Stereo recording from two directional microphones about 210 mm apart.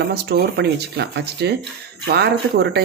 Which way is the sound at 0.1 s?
50° right (ahead or behind).